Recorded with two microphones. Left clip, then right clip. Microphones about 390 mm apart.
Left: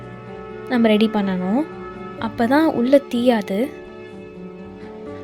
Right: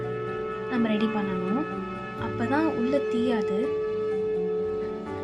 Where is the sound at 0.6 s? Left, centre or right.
Centre.